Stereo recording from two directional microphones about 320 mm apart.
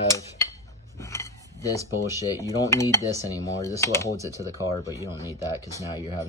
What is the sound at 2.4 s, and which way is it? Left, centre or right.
Speech, centre.